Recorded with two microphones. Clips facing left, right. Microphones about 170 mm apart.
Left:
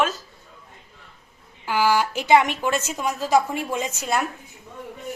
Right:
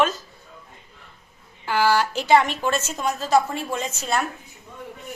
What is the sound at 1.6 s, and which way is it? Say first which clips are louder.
A woman's voice: even; 10° left (ahead or behind).